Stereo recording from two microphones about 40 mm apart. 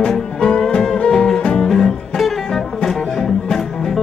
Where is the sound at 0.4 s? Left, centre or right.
Left.